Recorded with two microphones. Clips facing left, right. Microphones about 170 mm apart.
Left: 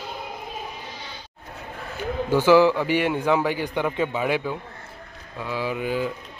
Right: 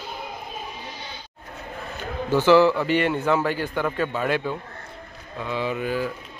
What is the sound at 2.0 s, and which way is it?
A man's voice, 10° left (ahead or behind).